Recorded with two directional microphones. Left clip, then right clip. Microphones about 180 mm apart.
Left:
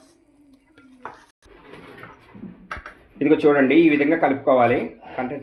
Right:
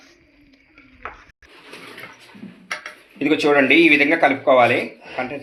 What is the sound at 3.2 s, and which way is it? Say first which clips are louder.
Speech: even; 35° left (ahead or behind).